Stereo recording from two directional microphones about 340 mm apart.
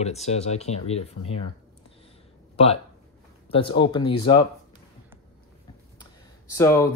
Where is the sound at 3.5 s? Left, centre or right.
Centre.